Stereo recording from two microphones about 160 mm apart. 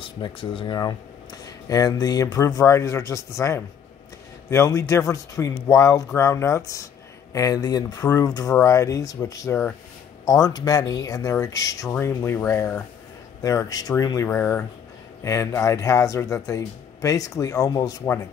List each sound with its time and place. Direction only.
0.0 s speech: 30° left (ahead or behind)